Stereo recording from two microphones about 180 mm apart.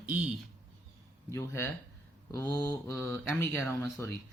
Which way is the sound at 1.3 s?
15° left (ahead or behind).